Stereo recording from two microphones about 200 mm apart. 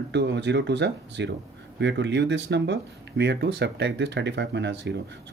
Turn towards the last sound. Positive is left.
turn(degrees=-60)  # may be behind; listen again after turning